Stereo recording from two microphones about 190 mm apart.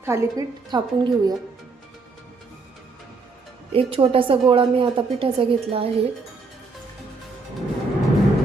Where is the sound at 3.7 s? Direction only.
30° right (ahead or behind).